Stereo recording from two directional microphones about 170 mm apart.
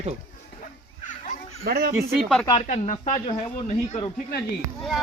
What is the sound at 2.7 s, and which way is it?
Speech, 45° left (ahead or behind).